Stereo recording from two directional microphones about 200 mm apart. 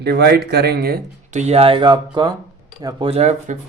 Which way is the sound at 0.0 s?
55° right (ahead or behind).